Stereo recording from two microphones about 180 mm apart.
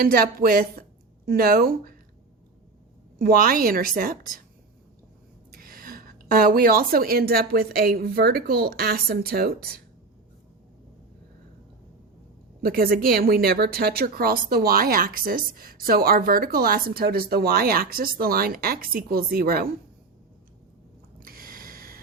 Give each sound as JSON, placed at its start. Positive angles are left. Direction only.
{"t": 0.0, "sound": "speech", "side_deg": -55}
{"t": 3.2, "sound": "a woman's voice", "side_deg": -55}
{"t": 5.5, "sound": "speech", "side_deg": -55}
{"t": 12.6, "sound": "speech", "side_deg": -55}
{"t": 21.2, "sound": "gasp", "side_deg": -55}